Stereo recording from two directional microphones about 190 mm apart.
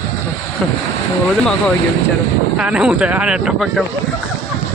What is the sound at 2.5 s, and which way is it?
Speech, 5° right (ahead or behind).